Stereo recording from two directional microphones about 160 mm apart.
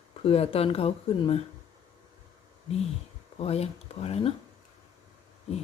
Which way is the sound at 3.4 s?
40° left (ahead or behind).